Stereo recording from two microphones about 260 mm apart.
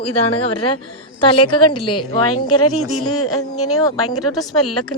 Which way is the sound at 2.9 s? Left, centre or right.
Left.